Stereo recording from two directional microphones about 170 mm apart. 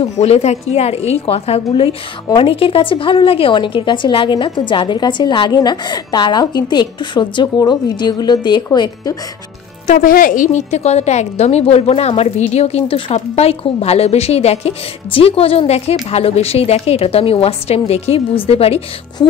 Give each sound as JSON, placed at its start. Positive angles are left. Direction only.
{"t": 0.0, "sound": "a woman's voice", "side_deg": 40}
{"t": 9.8, "sound": "a woman's voice", "side_deg": 50}